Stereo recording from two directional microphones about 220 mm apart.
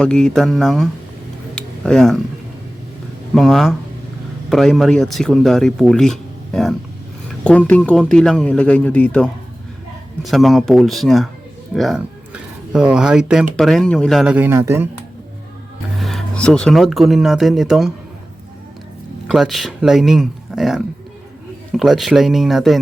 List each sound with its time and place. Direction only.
0.0 s speech: 5° left (ahead or behind)
1.5 s a sound: 5° left (ahead or behind)
3.3 s speech: centre (ahead or behind)
7.3 s a sound: 5° left (ahead or behind)
7.7 s speech: 5° left (ahead or behind); by 14.8 s 10° right (ahead or behind)
16.0 s speech: centre (ahead or behind)
19.3 s speech: centre (ahead or behind)